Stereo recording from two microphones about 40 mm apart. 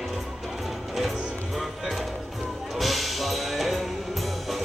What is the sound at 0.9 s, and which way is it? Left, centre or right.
Music, centre.